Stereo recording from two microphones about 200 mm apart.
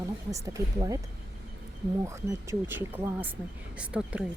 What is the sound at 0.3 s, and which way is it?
Speech, 15° right (ahead or behind).